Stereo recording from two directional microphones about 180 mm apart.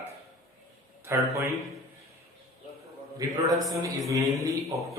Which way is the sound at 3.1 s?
20° right (ahead or behind).